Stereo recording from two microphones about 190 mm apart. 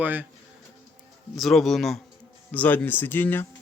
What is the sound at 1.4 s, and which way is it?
Speech, centre (ahead or behind).